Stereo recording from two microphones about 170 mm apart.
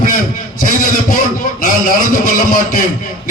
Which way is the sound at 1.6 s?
55° left (ahead or behind).